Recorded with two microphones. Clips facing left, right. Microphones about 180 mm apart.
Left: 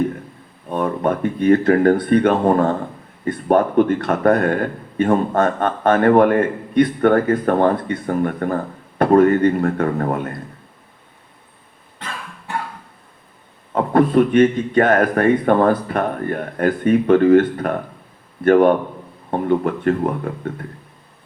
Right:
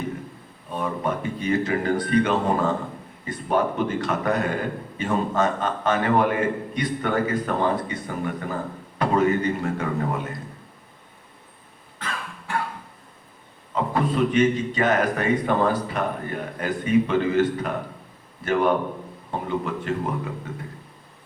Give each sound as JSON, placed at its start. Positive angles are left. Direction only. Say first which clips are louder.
{"t": 0.7, "sound": "a man's voice", "louder": "left 7 dB", "side_deg": 55}
{"t": 13.7, "sound": "a man's voice", "louder": "left 8 dB", "side_deg": 55}